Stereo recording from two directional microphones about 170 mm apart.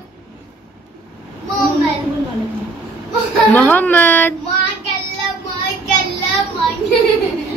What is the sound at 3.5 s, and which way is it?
Speech, 10° left (ahead or behind).